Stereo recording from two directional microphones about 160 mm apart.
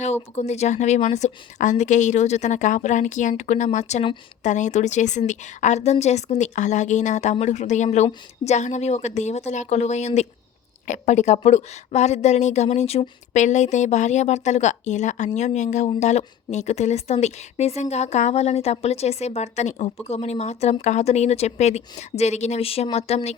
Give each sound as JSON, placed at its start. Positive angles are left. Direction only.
{"t": 0.3, "sound": "a woman's voice", "side_deg": 45}